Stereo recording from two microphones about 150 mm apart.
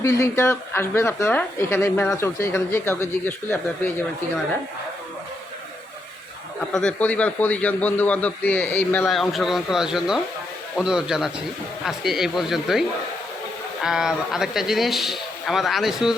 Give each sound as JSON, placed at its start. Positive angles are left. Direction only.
{"t": 0.0, "sound": "a man's voice", "side_deg": 20}
{"t": 6.7, "sound": "a man's voice", "side_deg": 5}
{"t": 9.0, "sound": "speech", "side_deg": 0}
{"t": 13.8, "sound": "speech", "side_deg": -5}